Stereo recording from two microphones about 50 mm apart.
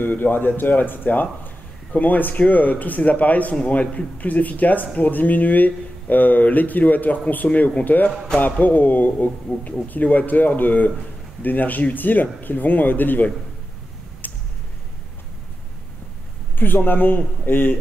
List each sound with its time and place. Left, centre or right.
0.0 s speech: left
14.2 s a sound: left
16.5 s a man's voice: left